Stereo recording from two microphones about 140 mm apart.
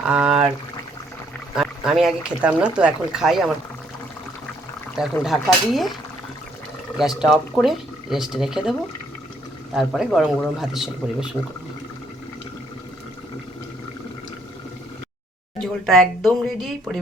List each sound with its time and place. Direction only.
0.1 s pour: 5° right (ahead or behind)
1.5 s speech: 5° right (ahead or behind)
5.2 s speech: centre (ahead or behind)
6.9 s speech: centre (ahead or behind)
9.7 s speech: centre (ahead or behind)
15.5 s speech: 5° left (ahead or behind)